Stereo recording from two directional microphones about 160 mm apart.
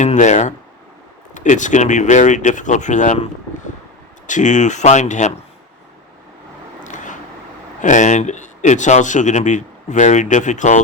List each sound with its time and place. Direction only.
0.0 s speech: 50° left (ahead or behind)
4.3 s speech: 50° left (ahead or behind)
6.8 s a sound: 50° left (ahead or behind)
7.8 s speech: 50° left (ahead or behind)